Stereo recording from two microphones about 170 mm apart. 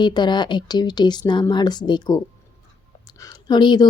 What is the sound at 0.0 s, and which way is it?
Speech, 25° left (ahead or behind).